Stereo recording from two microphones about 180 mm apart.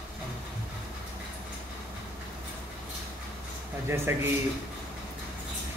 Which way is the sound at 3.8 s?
15° right (ahead or behind).